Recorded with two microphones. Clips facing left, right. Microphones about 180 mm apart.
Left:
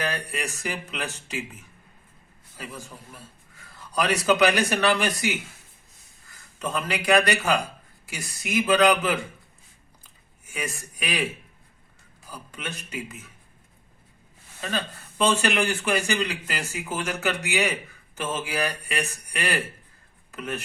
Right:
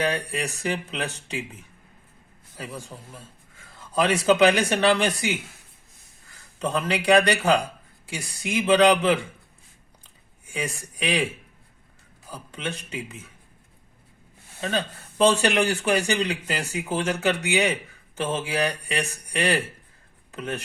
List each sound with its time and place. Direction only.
0.0 s speech: 30° right (ahead or behind)
2.6 s a man's voice: 30° right (ahead or behind)
6.6 s speech: 30° right (ahead or behind)
10.0 s a sound: 30° right (ahead or behind)
12.3 s speech: 30° right (ahead or behind)
15.2 s speech: 35° right (ahead or behind)